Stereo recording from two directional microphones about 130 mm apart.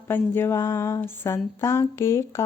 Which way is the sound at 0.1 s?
20° left (ahead or behind).